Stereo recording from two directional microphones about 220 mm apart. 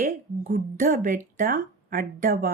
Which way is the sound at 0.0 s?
40° right (ahead or behind).